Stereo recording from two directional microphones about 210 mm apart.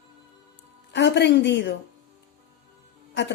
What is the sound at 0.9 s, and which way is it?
Speech, 55° left (ahead or behind).